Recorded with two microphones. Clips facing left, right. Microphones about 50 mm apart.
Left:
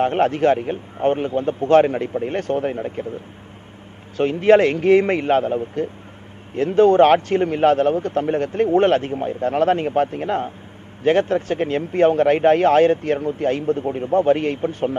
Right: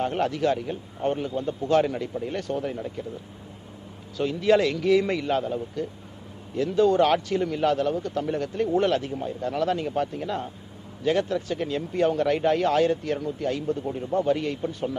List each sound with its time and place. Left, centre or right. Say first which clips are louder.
0.0 s a man's voice: left 7 dB; left
4.2 s a man's voice: left 7 dB; left